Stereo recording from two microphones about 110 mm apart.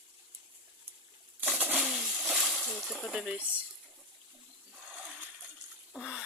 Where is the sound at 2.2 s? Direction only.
Centre (ahead or behind).